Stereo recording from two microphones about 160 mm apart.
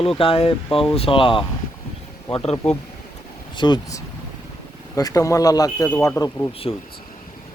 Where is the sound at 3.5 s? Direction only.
30° left (ahead or behind).